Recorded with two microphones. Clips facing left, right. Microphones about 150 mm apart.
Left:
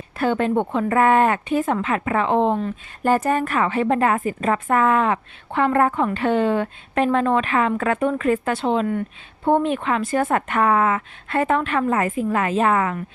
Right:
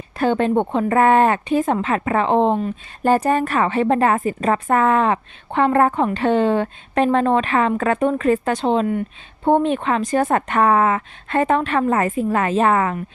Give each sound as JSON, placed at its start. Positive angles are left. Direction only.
{"t": 0.3, "sound": "speech", "side_deg": -25}
{"t": 2.6, "sound": "speech", "side_deg": -15}
{"t": 3.1, "sound": "a woman's voice", "side_deg": -35}